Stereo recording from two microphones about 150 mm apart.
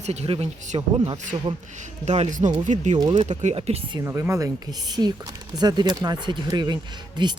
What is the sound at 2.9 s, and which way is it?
Speech, 30° right (ahead or behind).